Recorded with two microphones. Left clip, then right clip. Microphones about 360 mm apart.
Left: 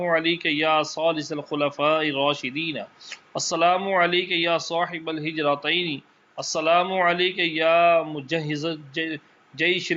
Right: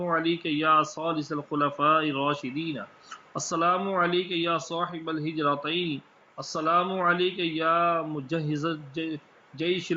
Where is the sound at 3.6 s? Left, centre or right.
Left.